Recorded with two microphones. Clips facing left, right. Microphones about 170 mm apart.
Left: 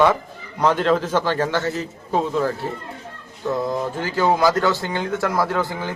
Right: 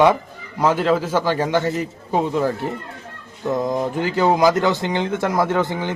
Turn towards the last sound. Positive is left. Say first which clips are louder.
# right 3 dB
turn(degrees=-20)  # may be behind; listen again after turning